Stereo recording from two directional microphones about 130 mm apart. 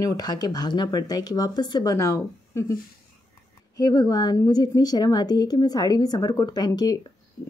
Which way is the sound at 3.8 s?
30° left (ahead or behind).